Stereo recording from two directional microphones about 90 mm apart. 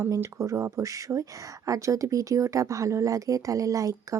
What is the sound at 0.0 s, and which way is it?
Speech, 30° right (ahead or behind).